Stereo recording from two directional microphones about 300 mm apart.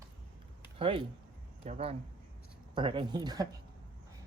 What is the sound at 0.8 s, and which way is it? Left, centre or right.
Speech, centre.